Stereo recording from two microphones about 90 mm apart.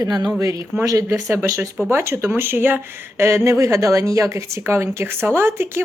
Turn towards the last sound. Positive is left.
turn(degrees=-30)  # may be behind; listen again after turning